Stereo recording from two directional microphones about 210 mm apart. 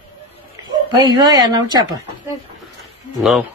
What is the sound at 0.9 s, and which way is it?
Speech, 20° right (ahead or behind).